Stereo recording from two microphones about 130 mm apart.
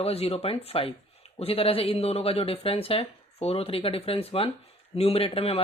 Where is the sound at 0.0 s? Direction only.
50° left (ahead or behind).